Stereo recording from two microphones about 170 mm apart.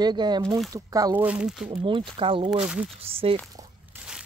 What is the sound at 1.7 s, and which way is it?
Speech, 30° right (ahead or behind).